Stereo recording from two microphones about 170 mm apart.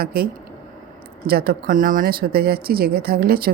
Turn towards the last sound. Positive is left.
turn(degrees=-65)  # may be behind; listen again after turning